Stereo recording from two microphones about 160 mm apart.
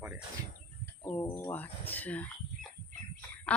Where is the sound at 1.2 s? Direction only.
25° left (ahead or behind).